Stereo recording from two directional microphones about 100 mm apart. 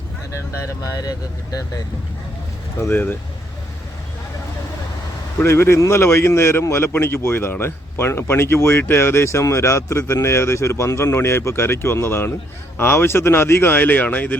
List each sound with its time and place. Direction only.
0.6 s speech: 35° left (ahead or behind)
2.8 s a man's voice: 20° left (ahead or behind)
5.4 s a man's voice: 25° left (ahead or behind)